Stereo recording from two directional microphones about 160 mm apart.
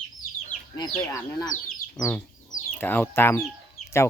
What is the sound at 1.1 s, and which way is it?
Speech, 20° left (ahead or behind).